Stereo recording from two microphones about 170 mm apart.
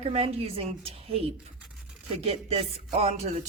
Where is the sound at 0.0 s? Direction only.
40° right (ahead or behind).